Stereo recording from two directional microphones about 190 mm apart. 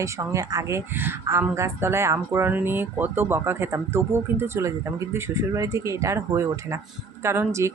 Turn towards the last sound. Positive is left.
turn(degrees=-15)  # may be behind; listen again after turning